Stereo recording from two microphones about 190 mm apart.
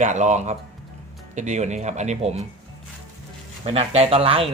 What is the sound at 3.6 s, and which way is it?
Speech, 30° right (ahead or behind).